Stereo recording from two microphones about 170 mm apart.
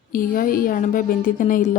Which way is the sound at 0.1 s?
55° left (ahead or behind).